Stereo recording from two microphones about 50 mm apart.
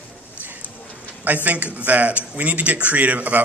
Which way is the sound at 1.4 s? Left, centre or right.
Right.